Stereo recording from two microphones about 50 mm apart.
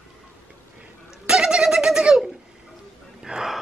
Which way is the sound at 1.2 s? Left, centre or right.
Centre.